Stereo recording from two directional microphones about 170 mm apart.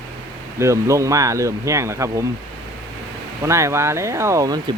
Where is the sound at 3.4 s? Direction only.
15° right (ahead or behind).